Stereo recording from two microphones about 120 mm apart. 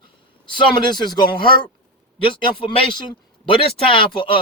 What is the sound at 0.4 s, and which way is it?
Speech, 40° left (ahead or behind).